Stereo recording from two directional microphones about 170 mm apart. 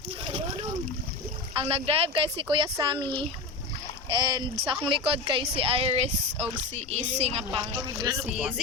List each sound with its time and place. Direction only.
0.3 s splash: 35° right (ahead or behind)
1.5 s speech: 35° right (ahead or behind)
4.1 s speech: 25° right (ahead or behind)
8.0 s speech: 20° right (ahead or behind)